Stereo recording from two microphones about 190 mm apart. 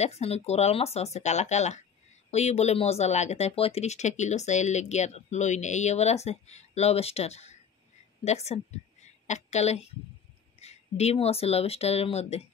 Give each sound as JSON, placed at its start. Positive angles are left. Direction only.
{"t": 0.0, "sound": "speech", "side_deg": 35}